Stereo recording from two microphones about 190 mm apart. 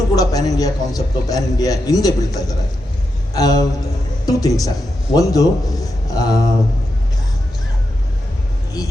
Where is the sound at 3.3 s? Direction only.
20° left (ahead or behind).